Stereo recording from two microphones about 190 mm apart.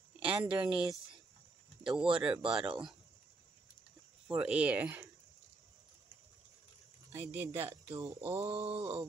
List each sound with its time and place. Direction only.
0.3 s speech: 5° right (ahead or behind)
4.4 s speech: 5° right (ahead or behind)
7.1 s speech: 15° right (ahead or behind)
8.2 s mantra: 30° right (ahead or behind)